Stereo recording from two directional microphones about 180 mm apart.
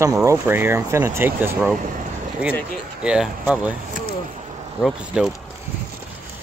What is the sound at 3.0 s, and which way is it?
Speech, 5° right (ahead or behind).